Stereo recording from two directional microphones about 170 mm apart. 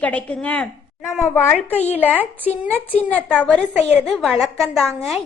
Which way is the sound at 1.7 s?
40° left (ahead or behind).